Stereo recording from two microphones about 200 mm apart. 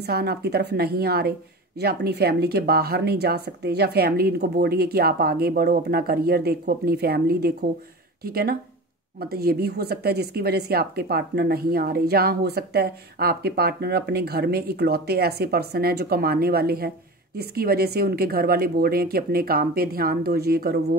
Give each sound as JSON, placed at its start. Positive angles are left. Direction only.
{"t": 0.0, "sound": "a woman's voice", "side_deg": -50}